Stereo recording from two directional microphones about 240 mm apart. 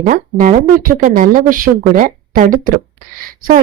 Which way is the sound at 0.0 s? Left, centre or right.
Right.